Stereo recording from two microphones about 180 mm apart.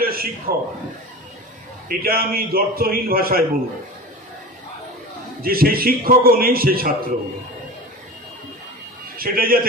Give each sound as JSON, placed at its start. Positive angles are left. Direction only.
{"t": 0.0, "sound": "a man's voice", "side_deg": -55}
{"t": 1.9, "sound": "a man's voice", "side_deg": -55}
{"t": 5.4, "sound": "a man's voice", "side_deg": -55}
{"t": 9.1, "sound": "a man's voice", "side_deg": -55}